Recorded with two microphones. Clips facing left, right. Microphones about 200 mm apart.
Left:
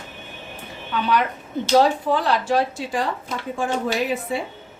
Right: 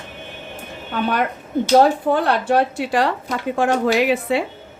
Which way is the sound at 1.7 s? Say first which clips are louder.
Right 3 dB; 55° right (ahead or behind).